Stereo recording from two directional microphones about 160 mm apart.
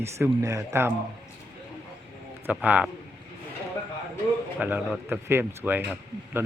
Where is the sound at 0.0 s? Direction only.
20° right (ahead or behind).